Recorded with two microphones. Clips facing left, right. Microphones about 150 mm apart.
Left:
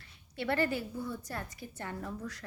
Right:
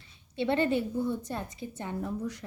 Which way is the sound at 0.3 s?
20° right (ahead or behind).